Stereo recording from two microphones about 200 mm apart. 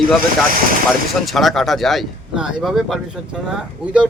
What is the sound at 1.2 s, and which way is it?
Speech, centre (ahead or behind).